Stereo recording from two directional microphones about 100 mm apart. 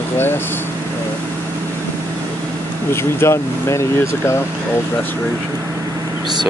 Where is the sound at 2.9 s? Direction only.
25° left (ahead or behind).